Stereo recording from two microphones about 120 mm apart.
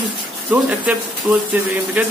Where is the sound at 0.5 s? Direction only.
10° right (ahead or behind).